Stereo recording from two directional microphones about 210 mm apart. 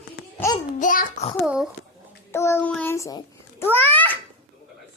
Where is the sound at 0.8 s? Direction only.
40° left (ahead or behind).